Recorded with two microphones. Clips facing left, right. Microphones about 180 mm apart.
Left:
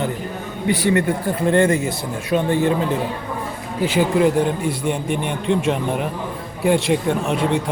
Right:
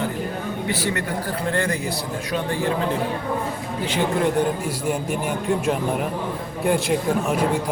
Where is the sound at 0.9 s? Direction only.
20° left (ahead or behind).